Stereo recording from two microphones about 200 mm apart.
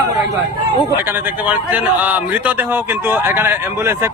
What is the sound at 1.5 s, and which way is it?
A man's voice, 10° right (ahead or behind).